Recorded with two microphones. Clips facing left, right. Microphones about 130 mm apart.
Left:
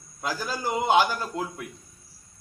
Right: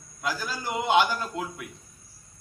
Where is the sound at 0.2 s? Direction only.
40° left (ahead or behind).